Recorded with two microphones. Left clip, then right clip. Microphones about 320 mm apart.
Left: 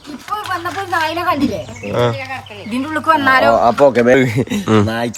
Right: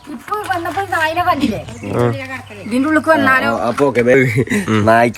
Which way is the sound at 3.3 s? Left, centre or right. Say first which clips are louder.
Left 4 dB; left.